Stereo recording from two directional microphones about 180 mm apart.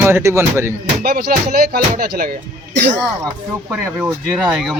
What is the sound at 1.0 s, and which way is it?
Speech, 55° right (ahead or behind).